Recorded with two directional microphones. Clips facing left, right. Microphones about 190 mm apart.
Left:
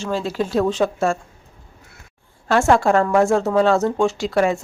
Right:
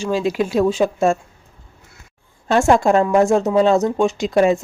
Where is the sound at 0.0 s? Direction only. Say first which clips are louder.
Right 4 dB; 15° right (ahead or behind).